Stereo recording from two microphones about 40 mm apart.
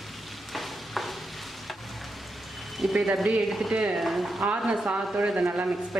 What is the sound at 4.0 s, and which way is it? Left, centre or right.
Speech, centre.